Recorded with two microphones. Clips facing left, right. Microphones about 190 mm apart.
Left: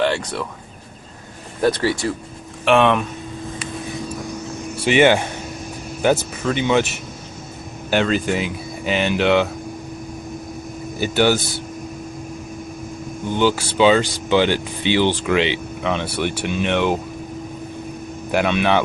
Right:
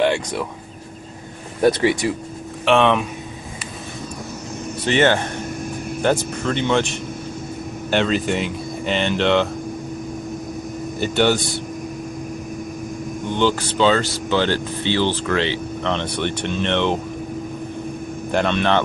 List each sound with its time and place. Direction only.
0.0 s speech: 15° right (ahead or behind)
1.6 s speech: 20° right (ahead or behind)
2.6 s speech: 5° left (ahead or behind)
4.8 s speech: 10° left (ahead or behind)
11.0 s speech: 5° left (ahead or behind)
13.4 s speech: 10° left (ahead or behind)
18.3 s speech: 5° left (ahead or behind)